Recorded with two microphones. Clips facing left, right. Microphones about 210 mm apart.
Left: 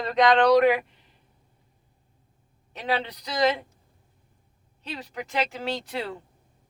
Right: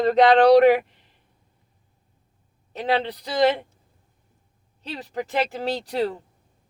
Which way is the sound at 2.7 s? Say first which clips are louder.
Right 5 dB; 35° right (ahead or behind).